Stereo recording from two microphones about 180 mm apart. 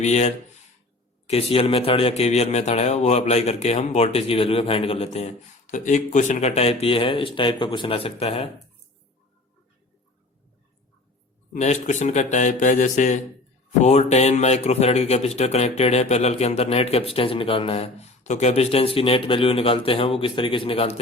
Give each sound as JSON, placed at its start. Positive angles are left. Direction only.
{"t": 0.0, "sound": "speech", "side_deg": 40}
{"t": 11.5, "sound": "a man's voice", "side_deg": 40}